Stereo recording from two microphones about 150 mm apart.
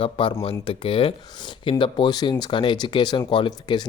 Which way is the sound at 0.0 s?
35° left (ahead or behind).